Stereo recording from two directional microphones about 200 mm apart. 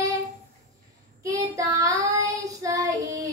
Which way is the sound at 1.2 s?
15° right (ahead or behind).